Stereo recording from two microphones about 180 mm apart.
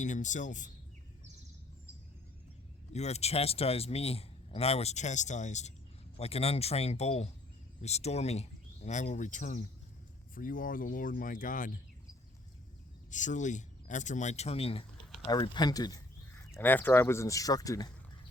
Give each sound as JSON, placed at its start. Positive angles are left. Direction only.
{"t": 0.0, "sound": "speech", "side_deg": 45}
{"t": 2.9, "sound": "a man's voice", "side_deg": 35}
{"t": 13.1, "sound": "speech", "side_deg": 45}
{"t": 16.5, "sound": "speech", "side_deg": 10}